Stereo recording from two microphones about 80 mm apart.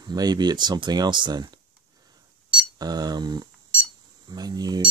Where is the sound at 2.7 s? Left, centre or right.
Right.